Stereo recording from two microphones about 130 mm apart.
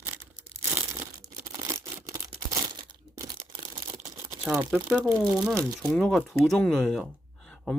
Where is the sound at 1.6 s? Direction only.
25° right (ahead or behind).